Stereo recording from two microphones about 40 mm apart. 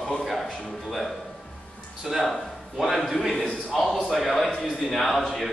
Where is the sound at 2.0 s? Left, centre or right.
Centre.